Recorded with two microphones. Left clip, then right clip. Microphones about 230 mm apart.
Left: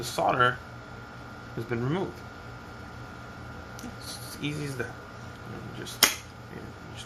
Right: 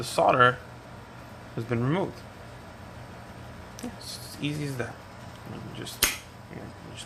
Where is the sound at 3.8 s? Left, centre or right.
Centre.